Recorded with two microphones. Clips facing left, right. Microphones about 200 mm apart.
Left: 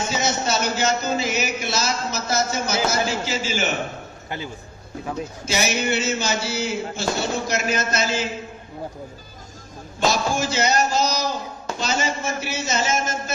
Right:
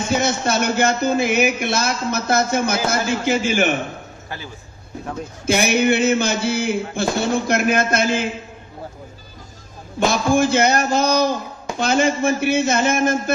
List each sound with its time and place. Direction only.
0.1 s a man's voice: 55° right (ahead or behind)
5.4 s a man's voice: 55° right (ahead or behind)
9.9 s a man's voice: 55° right (ahead or behind)